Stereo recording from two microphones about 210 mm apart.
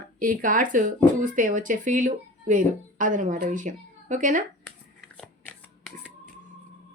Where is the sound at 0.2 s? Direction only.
40° right (ahead or behind).